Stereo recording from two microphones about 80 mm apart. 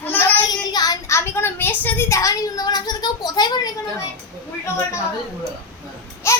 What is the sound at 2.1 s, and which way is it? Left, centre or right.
Speech, left.